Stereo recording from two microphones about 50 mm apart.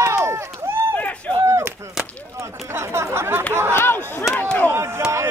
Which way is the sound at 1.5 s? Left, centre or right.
Right.